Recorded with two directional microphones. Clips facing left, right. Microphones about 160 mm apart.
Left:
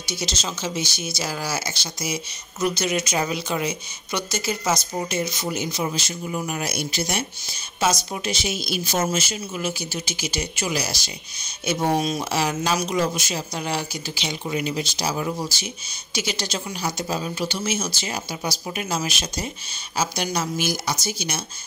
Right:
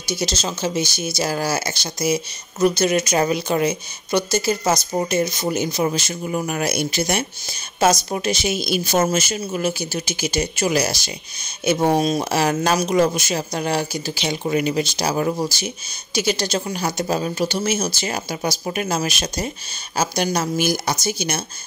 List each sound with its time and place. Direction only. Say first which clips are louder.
0.2 s speech: right 5 dB; 40° right (ahead or behind)